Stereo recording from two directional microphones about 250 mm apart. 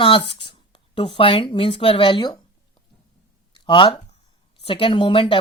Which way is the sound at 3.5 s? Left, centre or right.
Centre.